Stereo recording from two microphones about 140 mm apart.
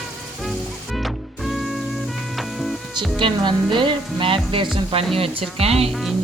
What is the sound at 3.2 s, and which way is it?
Music, 35° right (ahead or behind).